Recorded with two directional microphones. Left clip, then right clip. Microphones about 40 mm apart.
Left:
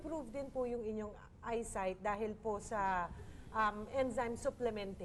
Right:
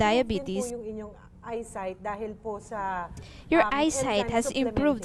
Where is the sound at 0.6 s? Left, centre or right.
Left.